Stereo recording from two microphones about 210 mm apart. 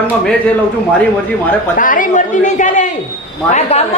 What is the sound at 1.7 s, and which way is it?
A woman's voice, 40° left (ahead or behind).